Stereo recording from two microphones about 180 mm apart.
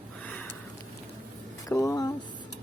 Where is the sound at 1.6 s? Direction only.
20° left (ahead or behind).